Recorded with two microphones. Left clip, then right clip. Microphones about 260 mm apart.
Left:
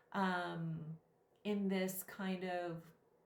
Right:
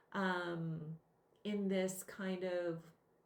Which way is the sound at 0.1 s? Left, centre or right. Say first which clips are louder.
Even; centre.